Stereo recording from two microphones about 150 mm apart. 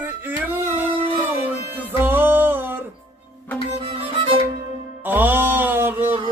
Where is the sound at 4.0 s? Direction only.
35° right (ahead or behind).